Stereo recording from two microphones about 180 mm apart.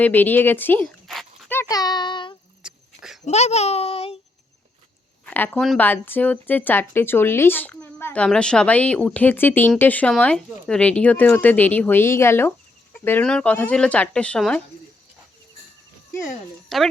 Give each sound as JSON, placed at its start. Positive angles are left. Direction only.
{"t": 0.0, "sound": "speech", "side_deg": 10}
{"t": 0.9, "sound": "dog", "side_deg": 0}
{"t": 1.5, "sound": "a child's voice", "side_deg": 15}
{"t": 2.6, "sound": "a sound", "side_deg": 0}
{"t": 3.2, "sound": "a child's voice", "side_deg": 35}
{"t": 5.2, "sound": "speech", "side_deg": 10}
{"t": 16.6, "sound": "speech", "side_deg": 0}